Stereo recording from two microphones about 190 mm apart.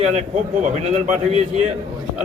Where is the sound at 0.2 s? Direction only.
35° right (ahead or behind).